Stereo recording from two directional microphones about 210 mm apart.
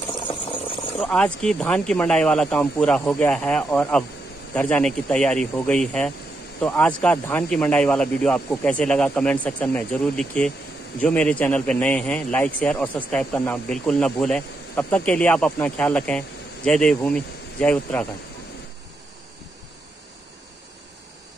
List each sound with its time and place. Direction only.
0.9 s a man's voice: 5° left (ahead or behind)